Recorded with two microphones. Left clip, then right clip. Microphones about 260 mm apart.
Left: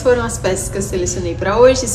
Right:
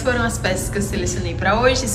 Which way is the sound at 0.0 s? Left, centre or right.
Centre.